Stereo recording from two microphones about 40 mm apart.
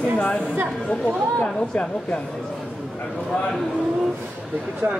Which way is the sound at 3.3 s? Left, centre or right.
Centre.